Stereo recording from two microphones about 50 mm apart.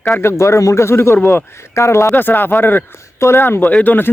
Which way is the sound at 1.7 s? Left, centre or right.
Left.